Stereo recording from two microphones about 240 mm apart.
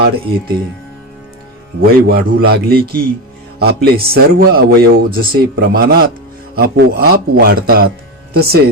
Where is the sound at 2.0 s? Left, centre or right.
Right.